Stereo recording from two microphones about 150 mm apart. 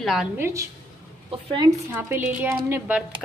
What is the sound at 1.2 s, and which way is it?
Speech, 35° right (ahead or behind).